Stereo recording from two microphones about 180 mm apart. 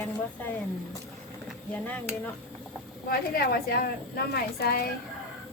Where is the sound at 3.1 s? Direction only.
60° left (ahead or behind).